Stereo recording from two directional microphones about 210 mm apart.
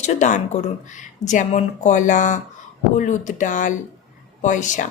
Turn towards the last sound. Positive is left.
turn(degrees=35)  # may be behind; listen again after turning